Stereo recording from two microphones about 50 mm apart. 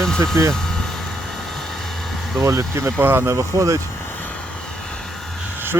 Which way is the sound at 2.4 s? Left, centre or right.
Right.